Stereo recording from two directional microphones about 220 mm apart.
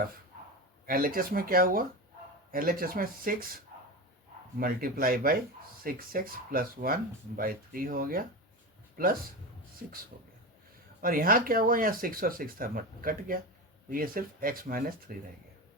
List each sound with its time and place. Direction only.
0.9 s speech: 40° right (ahead or behind)
4.6 s speech: 40° right (ahead or behind)
10.1 s speech: 45° right (ahead or behind)